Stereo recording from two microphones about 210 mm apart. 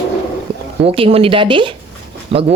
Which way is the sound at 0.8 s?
25° right (ahead or behind).